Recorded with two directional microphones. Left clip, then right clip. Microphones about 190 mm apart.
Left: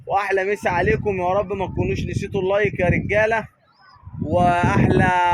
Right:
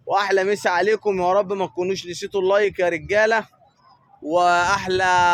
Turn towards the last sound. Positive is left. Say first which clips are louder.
# even
turn(degrees=-10)  # may be behind; listen again after turning